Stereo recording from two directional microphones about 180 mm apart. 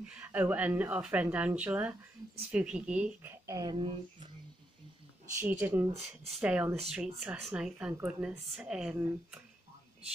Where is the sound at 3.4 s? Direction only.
20° right (ahead or behind).